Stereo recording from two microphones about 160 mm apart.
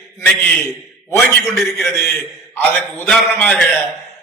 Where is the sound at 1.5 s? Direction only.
Centre (ahead or behind).